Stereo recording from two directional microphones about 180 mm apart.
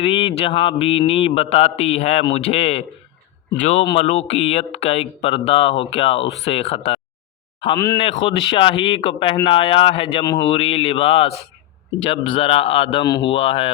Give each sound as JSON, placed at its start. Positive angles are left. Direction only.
{"t": 0.0, "sound": "a man's voice", "side_deg": 30}